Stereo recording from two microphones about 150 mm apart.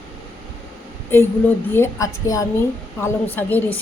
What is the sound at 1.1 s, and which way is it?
A woman's voice, 15° left (ahead or behind).